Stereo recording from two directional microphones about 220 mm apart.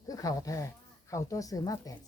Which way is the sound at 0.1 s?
15° left (ahead or behind).